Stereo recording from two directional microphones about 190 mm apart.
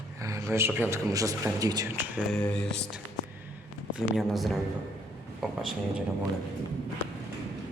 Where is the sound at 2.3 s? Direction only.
5° left (ahead or behind).